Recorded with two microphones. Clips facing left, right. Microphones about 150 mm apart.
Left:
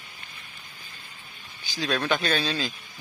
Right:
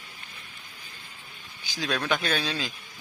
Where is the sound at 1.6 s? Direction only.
10° right (ahead or behind).